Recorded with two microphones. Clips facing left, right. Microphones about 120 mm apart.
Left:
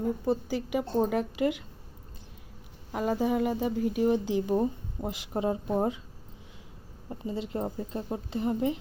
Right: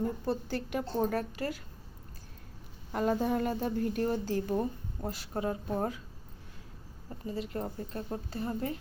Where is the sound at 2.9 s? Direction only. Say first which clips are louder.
Left 2 dB; 5° left (ahead or behind).